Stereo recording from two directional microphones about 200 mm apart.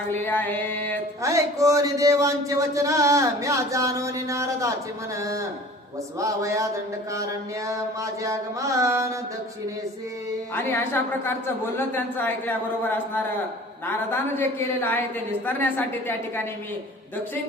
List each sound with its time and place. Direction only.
0.1 s a man's voice: 10° left (ahead or behind)
1.2 s a sound: 15° right (ahead or behind)
10.5 s a man's voice: 10° left (ahead or behind)
13.8 s a man's voice: 10° left (ahead or behind)